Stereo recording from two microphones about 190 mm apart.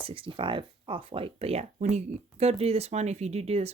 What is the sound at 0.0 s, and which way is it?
Speech, 30° right (ahead or behind).